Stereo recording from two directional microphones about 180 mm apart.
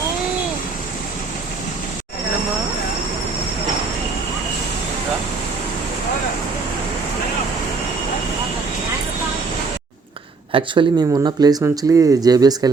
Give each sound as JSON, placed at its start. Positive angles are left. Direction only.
{"t": 10.5, "sound": "speech", "side_deg": -25}